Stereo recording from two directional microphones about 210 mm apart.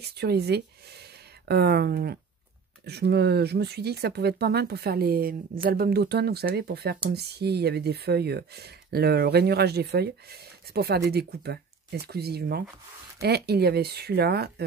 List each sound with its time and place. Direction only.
0.0 s speech: 50° right (ahead or behind)